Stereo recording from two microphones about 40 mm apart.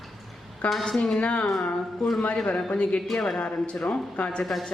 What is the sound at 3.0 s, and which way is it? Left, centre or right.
Speech, centre.